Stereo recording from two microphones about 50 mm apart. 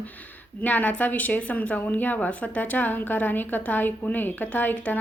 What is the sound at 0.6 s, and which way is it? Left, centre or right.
A woman's voice, left.